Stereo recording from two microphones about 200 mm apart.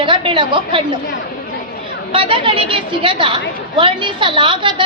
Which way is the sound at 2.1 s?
25° right (ahead or behind).